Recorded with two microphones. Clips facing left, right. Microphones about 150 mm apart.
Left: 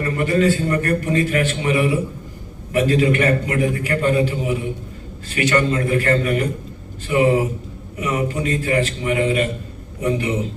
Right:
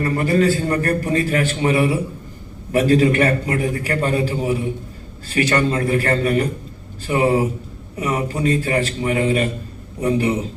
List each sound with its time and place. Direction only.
0.0 s a man's voice: 35° right (ahead or behind)